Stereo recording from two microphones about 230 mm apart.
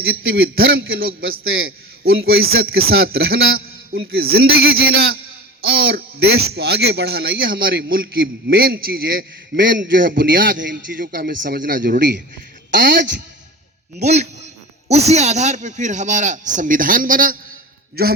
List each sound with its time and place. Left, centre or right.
0.0 s a man's voice: right